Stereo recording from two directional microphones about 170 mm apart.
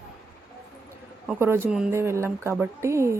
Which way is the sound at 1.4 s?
15° right (ahead or behind).